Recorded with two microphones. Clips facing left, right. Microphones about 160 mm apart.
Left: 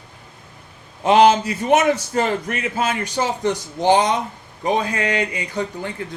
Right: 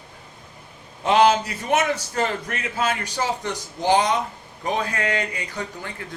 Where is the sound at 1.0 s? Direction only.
25° left (ahead or behind).